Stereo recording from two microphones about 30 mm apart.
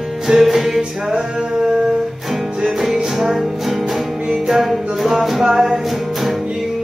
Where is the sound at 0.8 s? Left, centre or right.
Right; by 4.2 s centre.